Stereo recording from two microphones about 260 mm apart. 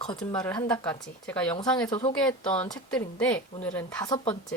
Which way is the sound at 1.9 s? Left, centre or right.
Left.